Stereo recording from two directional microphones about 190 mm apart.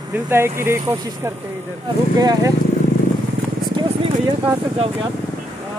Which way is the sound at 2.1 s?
20° right (ahead or behind).